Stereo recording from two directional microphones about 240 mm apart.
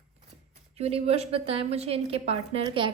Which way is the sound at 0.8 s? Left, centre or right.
Right.